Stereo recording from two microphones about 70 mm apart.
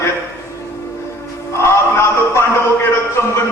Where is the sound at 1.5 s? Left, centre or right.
Left.